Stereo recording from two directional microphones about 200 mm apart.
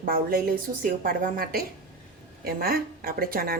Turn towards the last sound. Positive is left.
turn(degrees=-50)  # may be behind; listen again after turning